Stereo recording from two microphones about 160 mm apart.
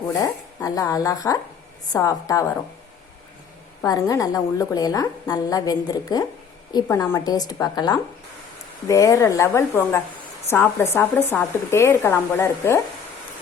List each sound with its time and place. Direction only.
0.1 s a woman's voice: 20° left (ahead or behind)
3.8 s a woman's voice: 15° left (ahead or behind)